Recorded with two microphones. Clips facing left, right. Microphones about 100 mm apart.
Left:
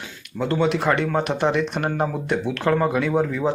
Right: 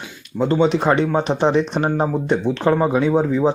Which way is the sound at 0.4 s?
20° right (ahead or behind).